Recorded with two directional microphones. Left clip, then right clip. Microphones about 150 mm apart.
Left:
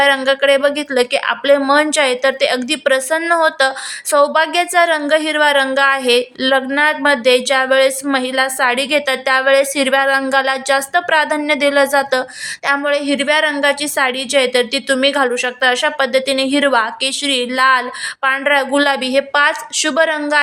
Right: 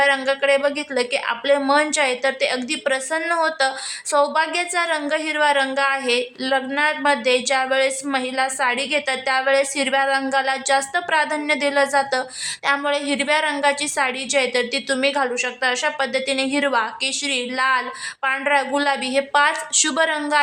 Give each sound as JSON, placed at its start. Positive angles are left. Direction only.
{"t": 0.0, "sound": "a woman's voice", "side_deg": 25}